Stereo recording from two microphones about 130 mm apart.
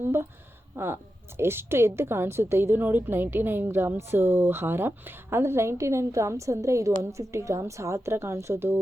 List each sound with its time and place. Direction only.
0.0 s a woman's voice: 20° right (ahead or behind)